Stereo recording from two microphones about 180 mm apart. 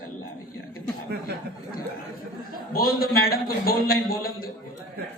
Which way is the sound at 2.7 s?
55° left (ahead or behind).